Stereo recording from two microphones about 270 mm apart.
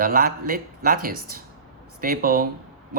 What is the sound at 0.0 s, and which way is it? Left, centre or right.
Speech, right.